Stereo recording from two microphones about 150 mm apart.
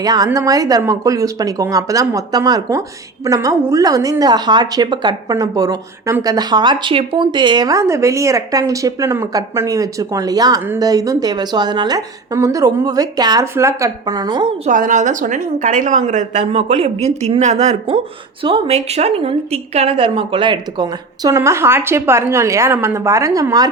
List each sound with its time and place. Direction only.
0.0 s a woman's voice: 25° right (ahead or behind)
14.7 s a woman's voice: 60° right (ahead or behind); by 23.6 s 20° right (ahead or behind)